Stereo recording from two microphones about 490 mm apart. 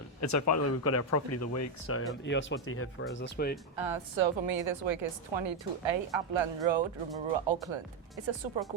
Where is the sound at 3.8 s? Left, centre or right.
Right.